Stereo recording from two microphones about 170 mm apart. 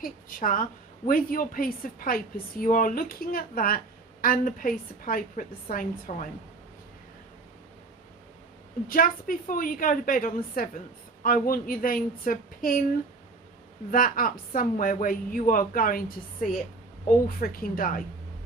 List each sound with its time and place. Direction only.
0.0 s a woman's voice: 55° left (ahead or behind)
8.9 s a woman's voice: 55° left (ahead or behind)
13.9 s a woman's voice: 55° left (ahead or behind)